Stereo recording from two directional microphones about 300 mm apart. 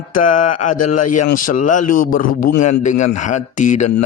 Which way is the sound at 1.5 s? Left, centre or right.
Left.